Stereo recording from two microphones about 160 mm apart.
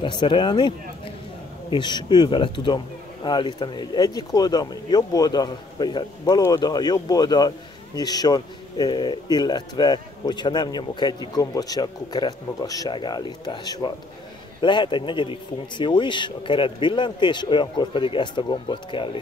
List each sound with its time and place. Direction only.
0.0 s speech: 30° left (ahead or behind)